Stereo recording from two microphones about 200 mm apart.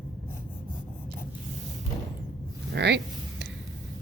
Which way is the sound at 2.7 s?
55° right (ahead or behind).